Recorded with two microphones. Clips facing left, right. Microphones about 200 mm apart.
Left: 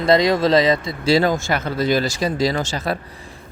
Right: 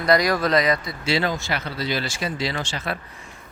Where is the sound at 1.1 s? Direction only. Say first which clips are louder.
Left 7 dB; 45° left (ahead or behind).